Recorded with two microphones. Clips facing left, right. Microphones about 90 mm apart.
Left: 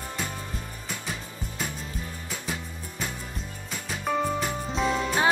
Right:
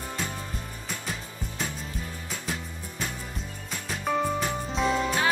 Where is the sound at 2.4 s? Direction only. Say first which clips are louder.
Even; 5° left (ahead or behind).